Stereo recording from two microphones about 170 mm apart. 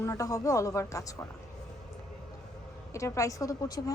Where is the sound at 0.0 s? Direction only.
20° left (ahead or behind).